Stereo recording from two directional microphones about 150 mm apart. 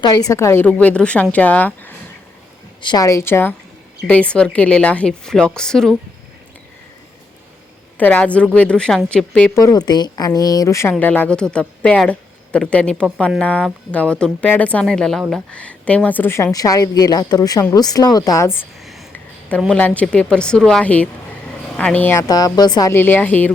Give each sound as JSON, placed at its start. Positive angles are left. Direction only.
{"t": 0.0, "sound": "a woman's voice", "side_deg": 25}
{"t": 2.8, "sound": "a woman's voice", "side_deg": 25}
{"t": 7.9, "sound": "a woman's voice", "side_deg": 10}
{"t": 9.6, "sound": "speech", "side_deg": 25}
{"t": 11.0, "sound": "a woman's voice", "side_deg": 10}
{"t": 19.1, "sound": "a sound", "side_deg": 10}
{"t": 19.7, "sound": "a woman's voice", "side_deg": 10}